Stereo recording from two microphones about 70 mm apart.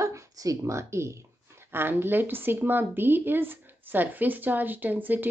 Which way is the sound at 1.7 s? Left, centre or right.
Right.